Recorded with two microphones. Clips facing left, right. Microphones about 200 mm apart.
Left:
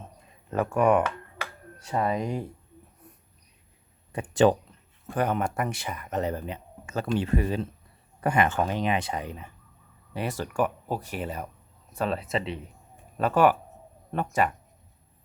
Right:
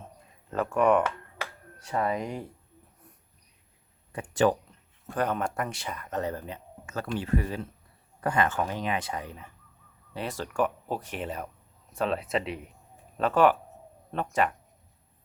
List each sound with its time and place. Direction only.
0.5 s speech: 10° left (ahead or behind)
2.0 s speech: 25° left (ahead or behind)
4.1 s speech: 20° left (ahead or behind)